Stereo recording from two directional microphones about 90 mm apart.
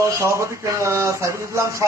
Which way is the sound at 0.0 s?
30° right (ahead or behind).